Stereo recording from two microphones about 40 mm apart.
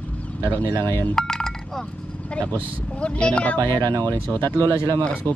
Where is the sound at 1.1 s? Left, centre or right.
Centre.